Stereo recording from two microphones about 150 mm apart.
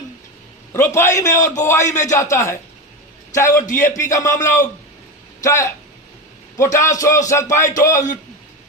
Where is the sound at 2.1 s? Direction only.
20° left (ahead or behind).